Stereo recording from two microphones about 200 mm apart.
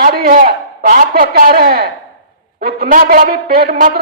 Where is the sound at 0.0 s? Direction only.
45° right (ahead or behind).